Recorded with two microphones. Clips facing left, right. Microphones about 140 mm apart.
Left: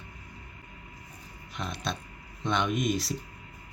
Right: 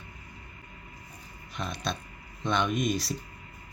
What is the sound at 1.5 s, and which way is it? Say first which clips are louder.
Speech: right 1 dB; 20° left (ahead or behind).